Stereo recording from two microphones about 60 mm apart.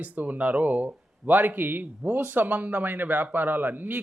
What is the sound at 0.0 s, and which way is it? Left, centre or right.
Speech, right.